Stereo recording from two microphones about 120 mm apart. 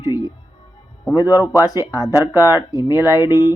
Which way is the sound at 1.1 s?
30° left (ahead or behind).